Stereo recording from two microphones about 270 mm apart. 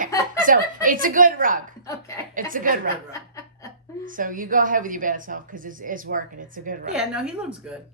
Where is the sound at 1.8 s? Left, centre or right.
Centre.